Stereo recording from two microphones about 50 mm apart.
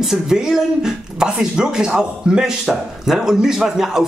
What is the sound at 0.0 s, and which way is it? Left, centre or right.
Speech, centre.